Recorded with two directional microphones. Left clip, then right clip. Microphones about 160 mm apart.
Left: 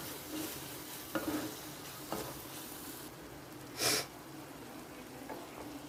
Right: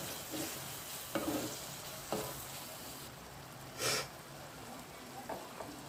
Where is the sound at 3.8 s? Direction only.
40° left (ahead or behind).